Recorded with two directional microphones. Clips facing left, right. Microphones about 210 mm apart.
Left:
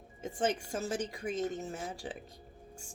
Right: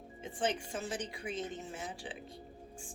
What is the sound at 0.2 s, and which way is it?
A woman's voice, 45° left (ahead or behind).